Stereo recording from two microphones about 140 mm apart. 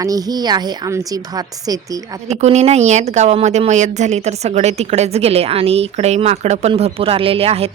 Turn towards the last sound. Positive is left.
turn(degrees=-45)  # may be behind; listen again after turning